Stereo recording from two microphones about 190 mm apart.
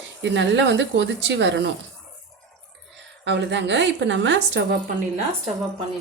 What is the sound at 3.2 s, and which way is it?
Speech, 65° right (ahead or behind).